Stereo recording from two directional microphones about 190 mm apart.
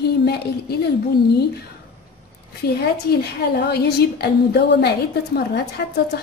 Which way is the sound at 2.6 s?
60° left (ahead or behind).